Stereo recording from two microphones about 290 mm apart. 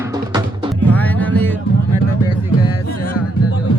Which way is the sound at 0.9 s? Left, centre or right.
Centre.